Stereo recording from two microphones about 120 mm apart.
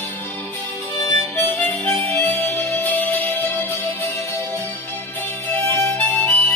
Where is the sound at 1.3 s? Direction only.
15° left (ahead or behind).